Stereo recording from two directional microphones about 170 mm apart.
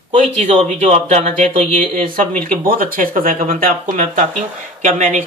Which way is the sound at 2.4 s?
55° right (ahead or behind).